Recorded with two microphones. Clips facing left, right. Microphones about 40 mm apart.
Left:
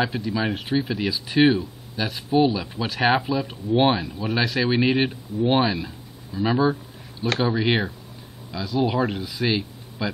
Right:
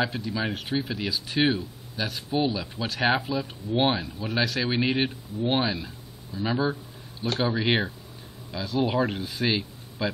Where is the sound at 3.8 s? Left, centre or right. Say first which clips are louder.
Left 4 dB; centre.